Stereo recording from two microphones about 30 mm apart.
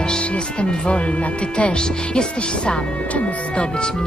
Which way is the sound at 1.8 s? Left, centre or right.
Left.